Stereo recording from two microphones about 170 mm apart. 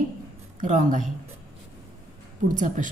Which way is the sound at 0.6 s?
50° right (ahead or behind).